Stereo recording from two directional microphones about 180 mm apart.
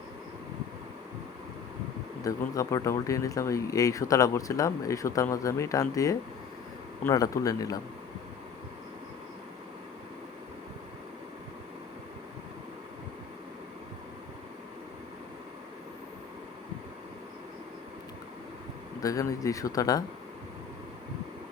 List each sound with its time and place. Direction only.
2.2 s speech: 20° left (ahead or behind)
19.0 s speech: 20° left (ahead or behind)